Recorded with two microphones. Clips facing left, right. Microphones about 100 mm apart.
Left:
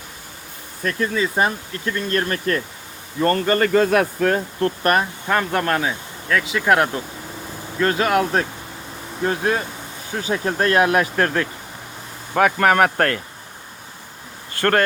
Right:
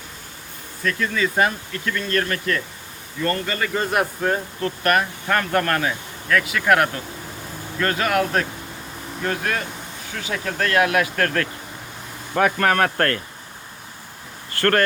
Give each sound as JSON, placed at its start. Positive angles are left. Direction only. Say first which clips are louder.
{"t": 0.8, "sound": "speech", "louder": "left 1 dB", "side_deg": 35}
{"t": 3.7, "sound": "speech", "louder": "left 6 dB", "side_deg": 75}
{"t": 4.8, "sound": "speech", "louder": "even", "side_deg": 30}
{"t": 5.3, "sound": "speech", "louder": "left 1 dB", "side_deg": 15}
{"t": 6.4, "sound": "speech", "louder": "left 2 dB", "side_deg": 25}
{"t": 11.2, "sound": "speech", "louder": "left 2 dB", "side_deg": 20}
{"t": 12.5, "sound": "speech", "louder": "left 3 dB", "side_deg": 15}
{"t": 14.5, "sound": "speech", "louder": "left 1 dB", "side_deg": 20}